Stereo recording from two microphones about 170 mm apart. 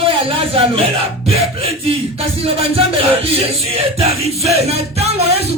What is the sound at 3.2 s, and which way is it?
Speech, 35° right (ahead or behind).